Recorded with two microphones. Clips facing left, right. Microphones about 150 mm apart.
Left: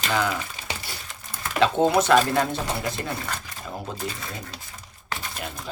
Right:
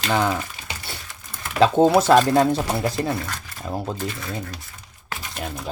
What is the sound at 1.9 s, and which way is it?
Speech, 35° right (ahead or behind).